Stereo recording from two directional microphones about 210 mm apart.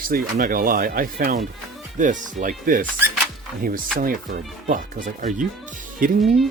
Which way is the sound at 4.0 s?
40° right (ahead or behind).